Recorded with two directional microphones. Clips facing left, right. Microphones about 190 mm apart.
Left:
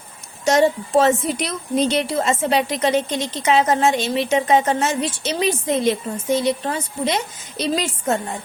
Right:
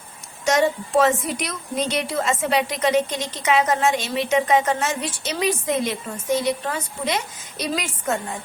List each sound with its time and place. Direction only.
0.4 s a woman's voice: 30° left (ahead or behind)